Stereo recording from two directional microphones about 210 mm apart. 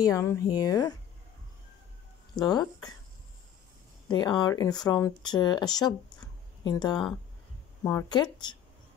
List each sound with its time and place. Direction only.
0.0 s speech: 15° left (ahead or behind)
2.3 s speech: 20° left (ahead or behind)
4.1 s speech: 20° left (ahead or behind)